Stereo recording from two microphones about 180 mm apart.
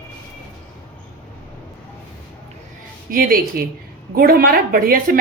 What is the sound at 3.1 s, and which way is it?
Speech, 55° right (ahead or behind).